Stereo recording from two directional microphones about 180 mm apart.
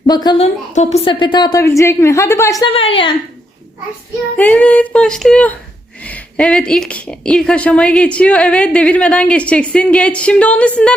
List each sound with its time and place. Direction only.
0.1 s a woman's voice: 25° left (ahead or behind)
0.7 s a woman's voice: 40° left (ahead or behind); by 2.6 s 15° left (ahead or behind)
2.6 s a woman's voice: 30° left (ahead or behind)
4.4 s a woman's voice: 10° left (ahead or behind)